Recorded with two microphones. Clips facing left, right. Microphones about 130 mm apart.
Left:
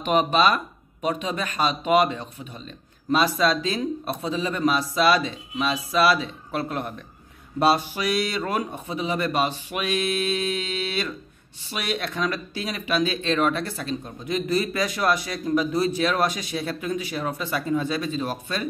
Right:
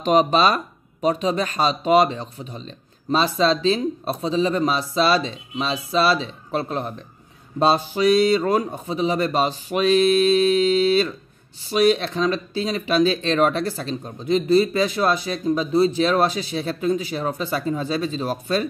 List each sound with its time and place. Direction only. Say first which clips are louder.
0.0 s speech: right 3 dB; 35° right (ahead or behind)